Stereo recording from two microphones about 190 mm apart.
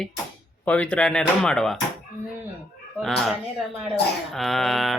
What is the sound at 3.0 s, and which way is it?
Speech, centre (ahead or behind).